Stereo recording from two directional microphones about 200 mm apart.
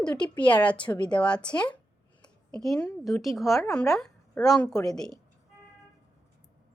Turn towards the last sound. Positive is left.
turn(degrees=0)  # may be behind; listen again after turning